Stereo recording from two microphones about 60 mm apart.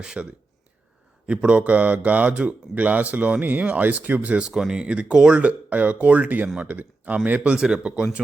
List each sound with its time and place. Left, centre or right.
0.0 s speech: centre
1.4 s speech: right
4.4 s speech: centre; by 7.5 s right
7.5 s speech: centre